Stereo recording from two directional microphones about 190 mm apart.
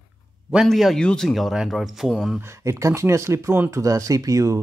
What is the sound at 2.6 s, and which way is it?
Speech, 15° right (ahead or behind).